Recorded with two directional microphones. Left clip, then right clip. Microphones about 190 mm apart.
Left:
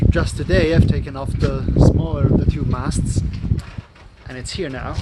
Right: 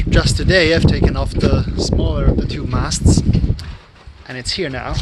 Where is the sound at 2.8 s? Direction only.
25° right (ahead or behind).